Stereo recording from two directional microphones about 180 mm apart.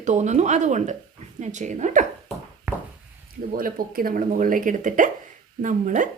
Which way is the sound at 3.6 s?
55° right (ahead or behind).